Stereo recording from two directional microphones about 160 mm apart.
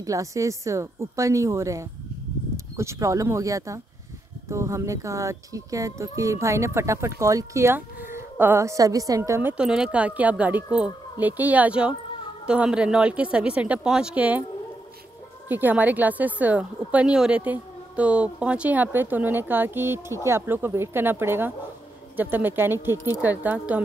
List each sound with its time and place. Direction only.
0.0 s a woman's voice: 20° right (ahead or behind)
15.4 s speech: 10° right (ahead or behind)